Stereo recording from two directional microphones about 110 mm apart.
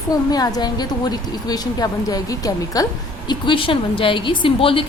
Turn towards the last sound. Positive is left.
turn(degrees=55)  # may be behind; listen again after turning